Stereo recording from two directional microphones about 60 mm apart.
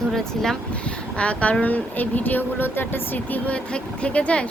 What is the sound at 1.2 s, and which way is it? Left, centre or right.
Speech, left.